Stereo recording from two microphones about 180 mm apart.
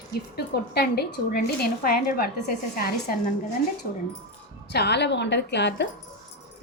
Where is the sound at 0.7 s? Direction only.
60° left (ahead or behind).